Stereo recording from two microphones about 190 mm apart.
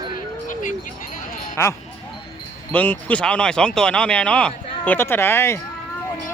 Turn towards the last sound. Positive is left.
turn(degrees=15)  # may be behind; listen again after turning